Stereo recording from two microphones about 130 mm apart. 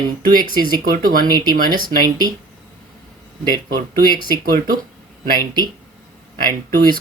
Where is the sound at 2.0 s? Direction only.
30° right (ahead or behind).